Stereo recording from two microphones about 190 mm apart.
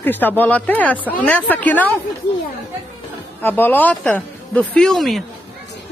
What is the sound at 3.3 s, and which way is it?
Speech, 10° left (ahead or behind).